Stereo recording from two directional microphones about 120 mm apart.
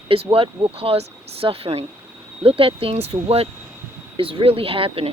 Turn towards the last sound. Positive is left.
turn(degrees=-50)  # may be behind; listen again after turning